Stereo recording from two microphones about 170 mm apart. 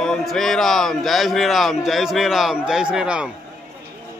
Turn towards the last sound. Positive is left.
turn(degrees=-5)  # may be behind; listen again after turning